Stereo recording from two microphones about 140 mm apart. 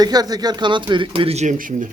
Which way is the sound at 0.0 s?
30° right (ahead or behind).